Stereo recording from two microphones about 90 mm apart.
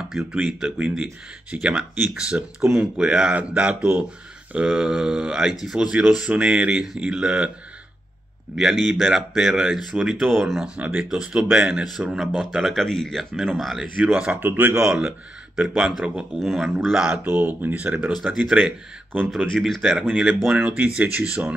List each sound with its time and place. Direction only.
0.1 s speech: 5° right (ahead or behind)
8.5 s speech: 5° right (ahead or behind)
10.8 s speech: 15° right (ahead or behind)
12.4 s speech: centre (ahead or behind); by 14.8 s 20° right (ahead or behind)
14.8 s speech: 10° right (ahead or behind)
17.2 s speech: 20° right (ahead or behind)
18.1 s speech: 5° right (ahead or behind)
19.4 s speech: centre (ahead or behind); by 21.5 s 15° right (ahead or behind)